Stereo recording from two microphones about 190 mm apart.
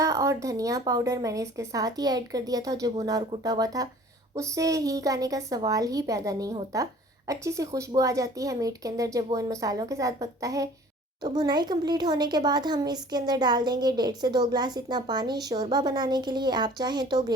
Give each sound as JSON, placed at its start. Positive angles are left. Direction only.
{"t": 0.0, "sound": "a woman's voice", "side_deg": -15}